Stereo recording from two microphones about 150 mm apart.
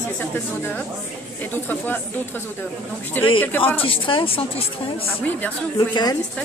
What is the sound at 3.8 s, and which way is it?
Speech, 35° left (ahead or behind).